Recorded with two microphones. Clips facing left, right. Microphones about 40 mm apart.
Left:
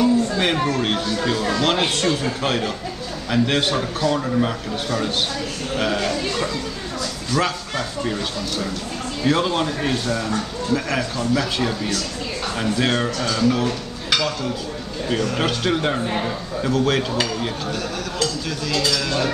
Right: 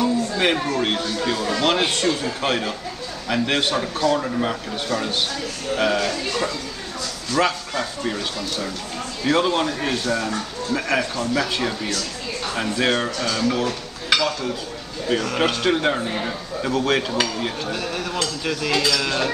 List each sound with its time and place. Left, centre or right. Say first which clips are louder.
0.0 s a man's voice: left 2 dB; centre
7.3 s a man's voice: right 2 dB; centre
18.5 s speech: right 3 dB; right